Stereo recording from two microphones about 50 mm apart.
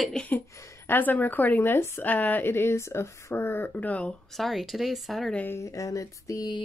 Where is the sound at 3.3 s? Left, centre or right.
Left.